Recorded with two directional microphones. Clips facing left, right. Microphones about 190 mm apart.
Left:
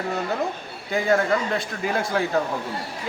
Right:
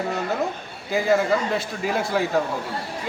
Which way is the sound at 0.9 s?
5° right (ahead or behind).